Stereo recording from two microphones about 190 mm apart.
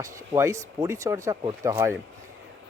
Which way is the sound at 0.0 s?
15° right (ahead or behind).